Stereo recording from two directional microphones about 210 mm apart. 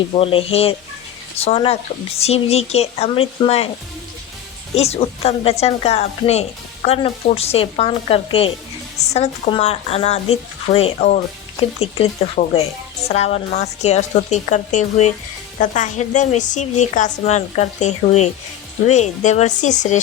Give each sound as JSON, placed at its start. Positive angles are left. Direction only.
{"t": 0.1, "sound": "speech", "side_deg": 25}
{"t": 4.7, "sound": "a woman's voice", "side_deg": 30}